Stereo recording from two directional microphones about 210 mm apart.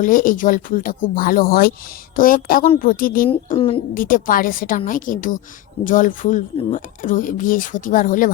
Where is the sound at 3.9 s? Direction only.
40° left (ahead or behind).